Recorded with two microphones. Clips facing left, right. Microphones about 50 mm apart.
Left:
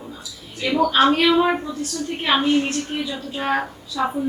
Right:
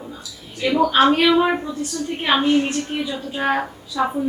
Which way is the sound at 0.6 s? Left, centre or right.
Centre.